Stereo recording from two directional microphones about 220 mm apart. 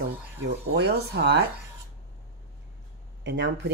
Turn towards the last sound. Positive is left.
turn(degrees=-50)  # may be behind; listen again after turning